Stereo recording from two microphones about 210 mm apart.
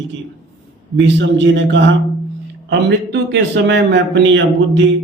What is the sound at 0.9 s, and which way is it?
A man's voice, 60° right (ahead or behind).